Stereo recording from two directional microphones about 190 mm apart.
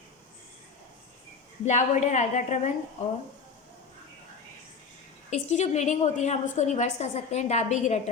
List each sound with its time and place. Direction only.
1.6 s a woman's voice: 40° left (ahead or behind)
5.3 s a woman's voice: 40° left (ahead or behind)